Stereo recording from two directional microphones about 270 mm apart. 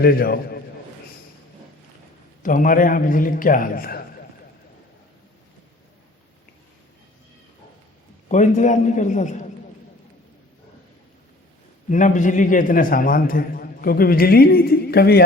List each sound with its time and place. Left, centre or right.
0.0 s a man's voice: left
2.4 s a man's voice: left
8.3 s a man's voice: left
11.9 s a man's voice: left